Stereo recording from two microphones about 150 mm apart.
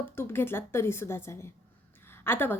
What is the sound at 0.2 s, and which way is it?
A woman's voice, 15° left (ahead or behind).